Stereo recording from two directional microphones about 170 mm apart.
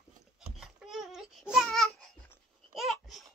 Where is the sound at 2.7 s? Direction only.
Centre (ahead or behind).